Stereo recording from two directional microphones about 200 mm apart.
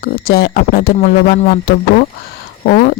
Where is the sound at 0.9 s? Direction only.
35° left (ahead or behind).